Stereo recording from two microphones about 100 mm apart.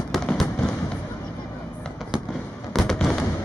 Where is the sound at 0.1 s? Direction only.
5° right (ahead or behind).